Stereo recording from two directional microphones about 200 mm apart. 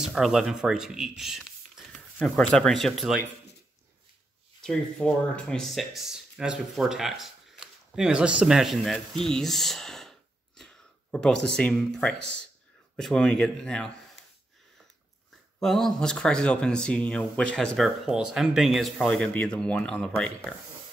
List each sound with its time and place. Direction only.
0.0 s speech: centre (ahead or behind)
4.6 s speech: 5° left (ahead or behind)
15.6 s speech: centre (ahead or behind)